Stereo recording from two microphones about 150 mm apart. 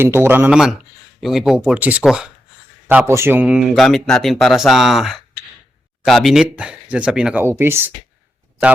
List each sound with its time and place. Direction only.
0.0 s speech: 15° right (ahead or behind)
3.1 s speech: 15° right (ahead or behind)
7.4 s speech: 15° right (ahead or behind)